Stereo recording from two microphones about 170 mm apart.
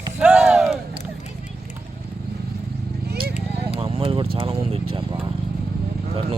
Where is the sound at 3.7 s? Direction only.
35° right (ahead or behind).